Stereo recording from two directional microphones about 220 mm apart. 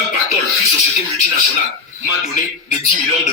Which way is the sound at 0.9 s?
30° left (ahead or behind).